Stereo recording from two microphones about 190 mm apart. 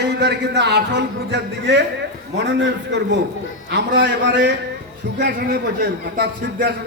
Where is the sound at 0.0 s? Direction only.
60° right (ahead or behind).